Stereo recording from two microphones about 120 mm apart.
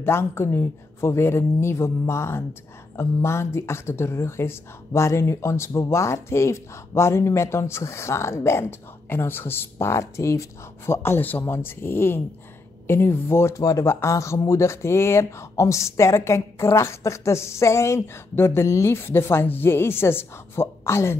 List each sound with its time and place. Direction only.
0.0 s speech: 20° left (ahead or behind)